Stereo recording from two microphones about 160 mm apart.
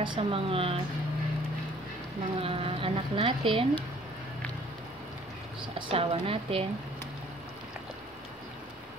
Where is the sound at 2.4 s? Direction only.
35° right (ahead or behind).